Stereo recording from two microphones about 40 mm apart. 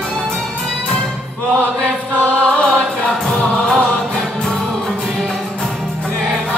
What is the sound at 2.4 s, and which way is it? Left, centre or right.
Music, centre.